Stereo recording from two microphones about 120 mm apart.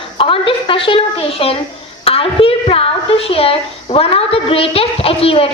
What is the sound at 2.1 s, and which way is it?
A woman's voice, 50° left (ahead or behind).